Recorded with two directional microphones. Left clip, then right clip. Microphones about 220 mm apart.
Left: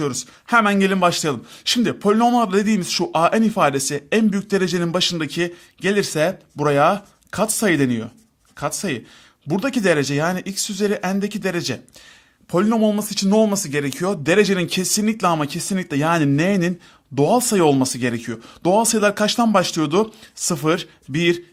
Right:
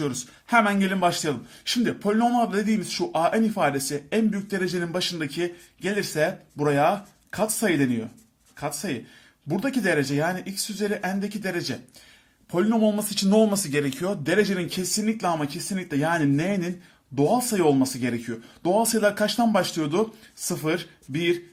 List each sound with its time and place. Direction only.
0.0 s a man's voice: 35° left (ahead or behind)